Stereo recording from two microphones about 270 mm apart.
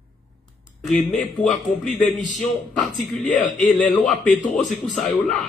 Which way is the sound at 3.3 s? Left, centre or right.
Left.